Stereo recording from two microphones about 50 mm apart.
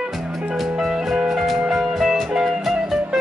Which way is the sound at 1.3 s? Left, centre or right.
Centre.